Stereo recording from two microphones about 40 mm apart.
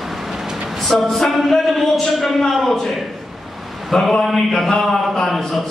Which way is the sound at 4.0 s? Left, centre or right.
Centre.